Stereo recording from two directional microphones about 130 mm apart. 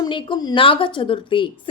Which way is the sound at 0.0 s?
35° left (ahead or behind).